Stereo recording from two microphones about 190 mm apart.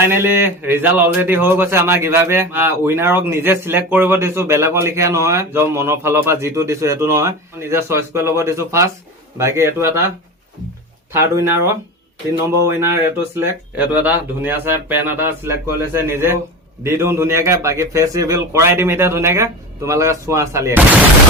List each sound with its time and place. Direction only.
0.0 s speech: 10° right (ahead or behind)
11.1 s speech: 15° right (ahead or behind)